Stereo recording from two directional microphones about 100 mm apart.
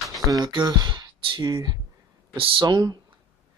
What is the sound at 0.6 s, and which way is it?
Speech, 45° right (ahead or behind).